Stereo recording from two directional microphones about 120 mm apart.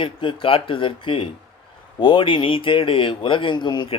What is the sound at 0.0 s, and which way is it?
Speech, 45° left (ahead or behind).